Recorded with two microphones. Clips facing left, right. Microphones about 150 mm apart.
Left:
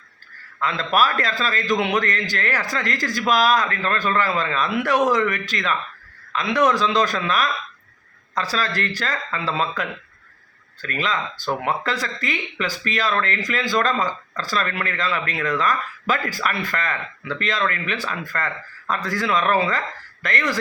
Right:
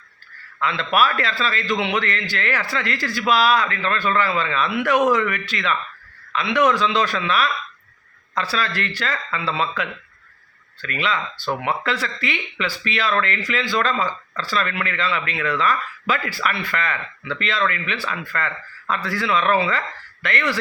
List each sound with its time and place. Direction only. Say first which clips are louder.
0.6 s speech: even; 40° left (ahead or behind)